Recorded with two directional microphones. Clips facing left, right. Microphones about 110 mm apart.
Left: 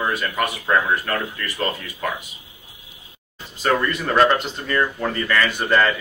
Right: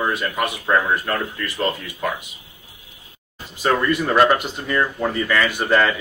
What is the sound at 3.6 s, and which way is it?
A man's voice, 10° right (ahead or behind).